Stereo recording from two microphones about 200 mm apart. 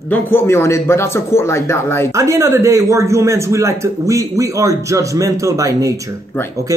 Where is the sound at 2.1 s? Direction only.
15° right (ahead or behind).